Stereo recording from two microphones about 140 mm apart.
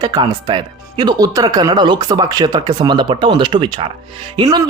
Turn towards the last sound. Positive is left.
turn(degrees=-30)  # may be behind; listen again after turning